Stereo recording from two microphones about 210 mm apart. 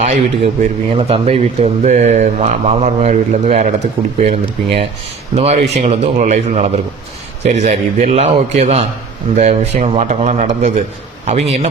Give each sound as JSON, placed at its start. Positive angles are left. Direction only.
{"t": 0.0, "sound": "speech", "side_deg": -35}